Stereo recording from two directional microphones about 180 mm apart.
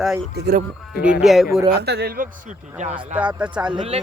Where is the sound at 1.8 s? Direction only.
65° right (ahead or behind).